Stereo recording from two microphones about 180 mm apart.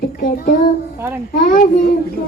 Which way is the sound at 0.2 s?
55° left (ahead or behind).